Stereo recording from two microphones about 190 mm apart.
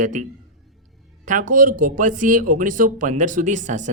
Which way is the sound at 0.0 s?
45° right (ahead or behind).